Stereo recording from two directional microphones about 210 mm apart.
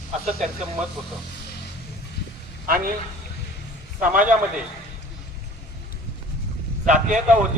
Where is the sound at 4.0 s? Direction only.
40° right (ahead or behind).